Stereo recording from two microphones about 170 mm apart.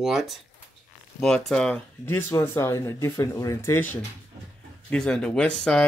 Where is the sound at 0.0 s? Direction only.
Centre (ahead or behind).